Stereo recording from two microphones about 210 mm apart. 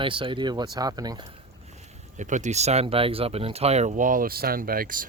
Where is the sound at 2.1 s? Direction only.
35° right (ahead or behind).